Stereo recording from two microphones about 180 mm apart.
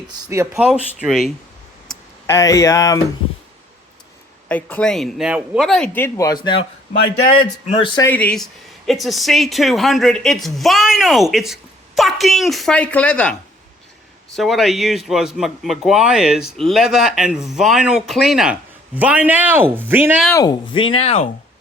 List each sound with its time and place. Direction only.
0.3 s speech: 15° right (ahead or behind)
0.6 s a woman's voice: 5° right (ahead or behind)
2.2 s speech: 15° left (ahead or behind)
4.4 s speech: 10° left (ahead or behind); by 6.7 s 25° left (ahead or behind)
7.7 s speech: 30° left (ahead or behind)
8.0 s a woman's voice: 10° left (ahead or behind)
14.3 s a woman's voice: centre (ahead or behind)
20.3 s speech: 20° left (ahead or behind)